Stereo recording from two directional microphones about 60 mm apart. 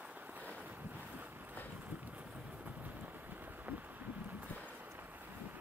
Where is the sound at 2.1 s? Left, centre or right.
Right.